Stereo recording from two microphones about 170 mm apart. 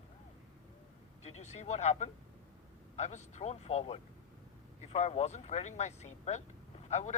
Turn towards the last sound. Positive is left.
turn(degrees=40)  # may be behind; listen again after turning